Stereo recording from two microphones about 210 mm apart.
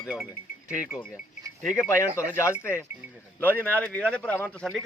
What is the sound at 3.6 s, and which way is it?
Speech, 10° left (ahead or behind).